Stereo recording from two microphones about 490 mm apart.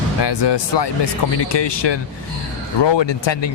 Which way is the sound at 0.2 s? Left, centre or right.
Left.